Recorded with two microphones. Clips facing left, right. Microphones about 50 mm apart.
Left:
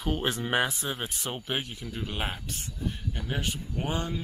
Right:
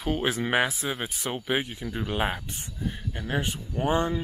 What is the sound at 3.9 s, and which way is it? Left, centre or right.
Speech, right.